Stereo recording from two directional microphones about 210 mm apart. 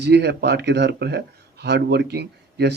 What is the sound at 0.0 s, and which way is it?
A man's voice, 50° right (ahead or behind).